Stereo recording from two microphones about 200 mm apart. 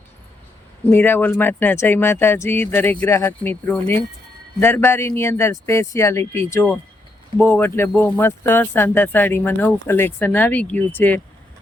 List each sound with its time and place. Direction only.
0.9 s speech: 10° left (ahead or behind)